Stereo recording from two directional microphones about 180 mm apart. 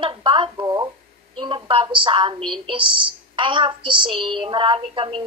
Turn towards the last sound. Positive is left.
turn(degrees=-30)  # may be behind; listen again after turning